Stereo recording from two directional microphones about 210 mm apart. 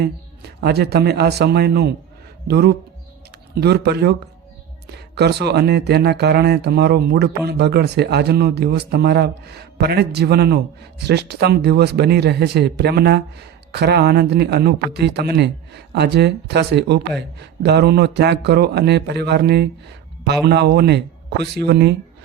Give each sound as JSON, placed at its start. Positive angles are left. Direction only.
{"t": 0.0, "sound": "speech", "side_deg": -50}